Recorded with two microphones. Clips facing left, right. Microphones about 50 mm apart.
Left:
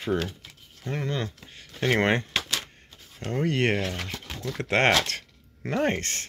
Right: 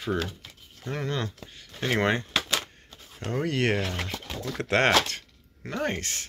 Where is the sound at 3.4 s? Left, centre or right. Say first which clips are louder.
Left 2 dB; centre.